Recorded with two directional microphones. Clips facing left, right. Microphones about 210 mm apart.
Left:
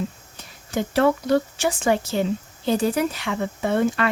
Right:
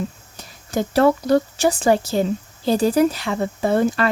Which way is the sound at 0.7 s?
40° right (ahead or behind).